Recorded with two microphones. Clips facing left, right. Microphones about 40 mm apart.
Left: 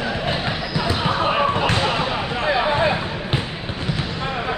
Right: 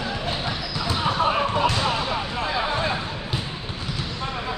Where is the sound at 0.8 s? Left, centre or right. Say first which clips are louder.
Left 1 dB; left.